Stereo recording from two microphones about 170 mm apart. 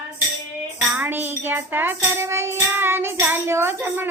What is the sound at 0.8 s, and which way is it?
Music, 10° right (ahead or behind).